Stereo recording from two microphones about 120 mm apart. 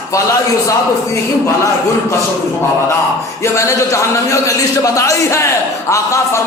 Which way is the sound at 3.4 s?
25° left (ahead or behind).